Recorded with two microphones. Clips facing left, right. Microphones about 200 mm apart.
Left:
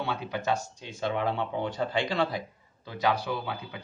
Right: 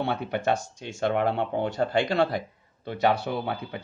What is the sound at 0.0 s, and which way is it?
Speech, 60° right (ahead or behind).